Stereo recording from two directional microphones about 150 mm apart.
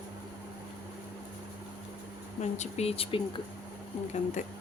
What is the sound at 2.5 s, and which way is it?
Speech, 45° left (ahead or behind).